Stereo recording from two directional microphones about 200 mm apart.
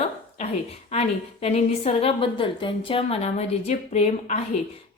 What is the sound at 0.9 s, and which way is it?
A woman's voice, 30° left (ahead or behind).